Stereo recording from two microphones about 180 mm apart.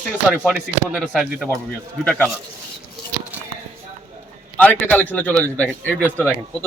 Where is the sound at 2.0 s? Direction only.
10° left (ahead or behind).